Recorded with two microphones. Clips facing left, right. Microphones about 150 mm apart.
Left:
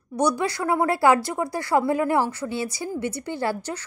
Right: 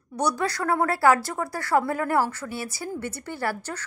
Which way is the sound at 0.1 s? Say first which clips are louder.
Left 4 dB; 10° right (ahead or behind).